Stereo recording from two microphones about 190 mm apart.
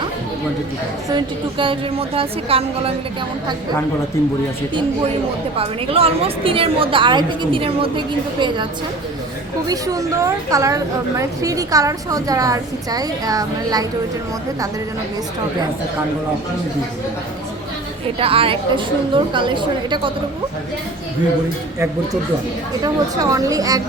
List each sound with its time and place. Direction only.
1.1 s a woman's voice: 25° right (ahead or behind)
5.5 s a woman's voice: 30° right (ahead or behind)
9.6 s a woman's voice: 20° right (ahead or behind)
18.2 s a woman's voice: 30° right (ahead or behind)
22.8 s a woman's voice: 20° right (ahead or behind)